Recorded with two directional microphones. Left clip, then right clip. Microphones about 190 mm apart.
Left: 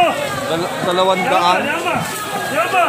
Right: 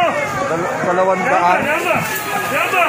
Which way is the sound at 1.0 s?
10° left (ahead or behind).